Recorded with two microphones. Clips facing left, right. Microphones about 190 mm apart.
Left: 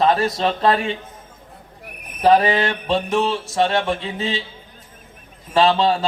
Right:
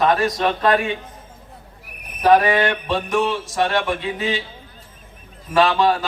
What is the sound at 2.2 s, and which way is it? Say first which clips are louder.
A man's voice: even; 25° left (ahead or behind).